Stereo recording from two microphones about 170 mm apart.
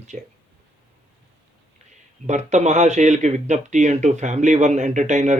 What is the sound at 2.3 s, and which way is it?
Speech, 45° right (ahead or behind).